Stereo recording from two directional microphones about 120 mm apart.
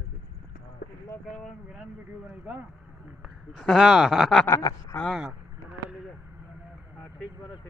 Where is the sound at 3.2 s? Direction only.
Centre (ahead or behind).